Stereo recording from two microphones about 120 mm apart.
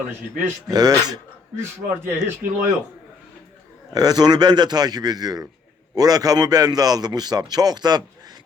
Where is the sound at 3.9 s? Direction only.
30° right (ahead or behind).